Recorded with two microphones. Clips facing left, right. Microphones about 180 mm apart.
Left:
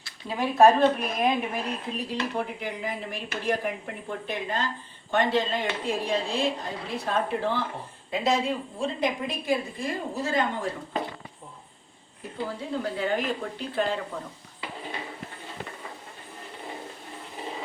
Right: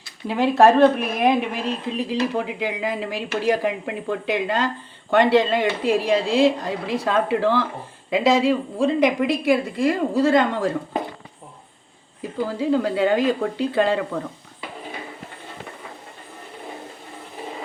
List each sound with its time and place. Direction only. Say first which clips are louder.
0.3 s a woman's voice: right 4 dB; 80° right
12.5 s a woman's voice: right 11 dB; 90° right